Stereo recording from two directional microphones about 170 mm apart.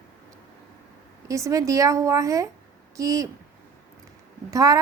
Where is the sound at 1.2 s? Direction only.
20° right (ahead or behind).